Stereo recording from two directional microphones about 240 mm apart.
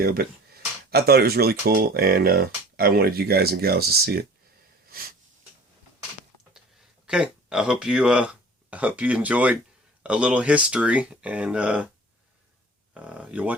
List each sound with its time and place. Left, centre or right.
0.0 s speech: right
4.9 s wheeze: right
7.1 s speech: centre
12.9 s speech: centre